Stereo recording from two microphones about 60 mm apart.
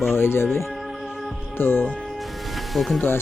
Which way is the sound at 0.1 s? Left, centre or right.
Left.